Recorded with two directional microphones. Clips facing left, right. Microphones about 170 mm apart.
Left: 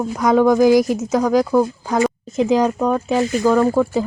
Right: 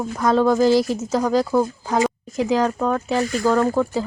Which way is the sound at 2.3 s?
20° left (ahead or behind).